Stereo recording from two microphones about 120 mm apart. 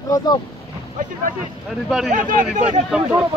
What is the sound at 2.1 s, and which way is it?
Speech, 90° right.